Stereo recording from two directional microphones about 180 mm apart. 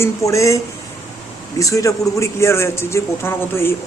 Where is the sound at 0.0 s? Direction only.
15° left (ahead or behind).